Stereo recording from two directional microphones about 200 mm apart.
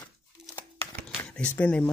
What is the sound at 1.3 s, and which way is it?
Speech, 5° left (ahead or behind).